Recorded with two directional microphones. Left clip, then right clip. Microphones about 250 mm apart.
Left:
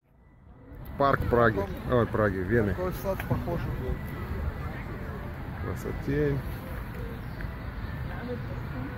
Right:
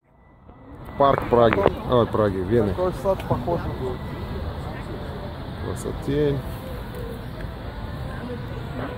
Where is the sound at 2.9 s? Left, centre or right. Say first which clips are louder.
Right 8 dB; left.